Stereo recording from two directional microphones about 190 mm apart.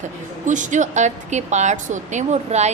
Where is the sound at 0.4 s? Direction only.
40° right (ahead or behind).